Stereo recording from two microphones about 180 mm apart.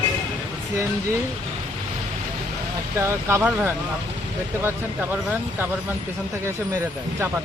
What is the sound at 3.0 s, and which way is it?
Speech, 15° right (ahead or behind).